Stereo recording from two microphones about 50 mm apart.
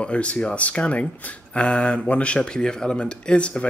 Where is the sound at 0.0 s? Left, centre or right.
Left.